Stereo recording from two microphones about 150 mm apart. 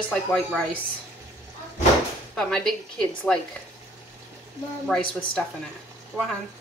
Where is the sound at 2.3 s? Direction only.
5° left (ahead or behind).